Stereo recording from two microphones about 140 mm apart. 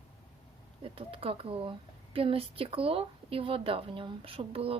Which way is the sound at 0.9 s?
40° right (ahead or behind).